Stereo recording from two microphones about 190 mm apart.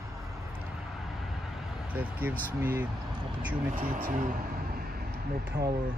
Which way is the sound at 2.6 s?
10° right (ahead or behind).